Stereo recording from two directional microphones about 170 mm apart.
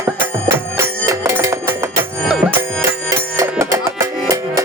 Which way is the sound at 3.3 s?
15° right (ahead or behind).